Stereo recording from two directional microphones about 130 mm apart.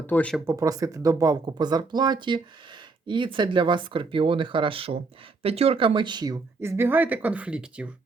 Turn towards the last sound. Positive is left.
turn(degrees=-10)  # may be behind; listen again after turning